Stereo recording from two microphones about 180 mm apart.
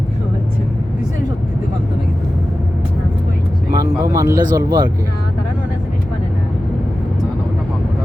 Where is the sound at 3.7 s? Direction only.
20° right (ahead or behind).